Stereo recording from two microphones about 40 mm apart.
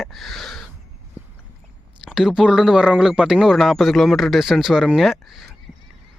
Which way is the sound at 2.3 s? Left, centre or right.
Centre.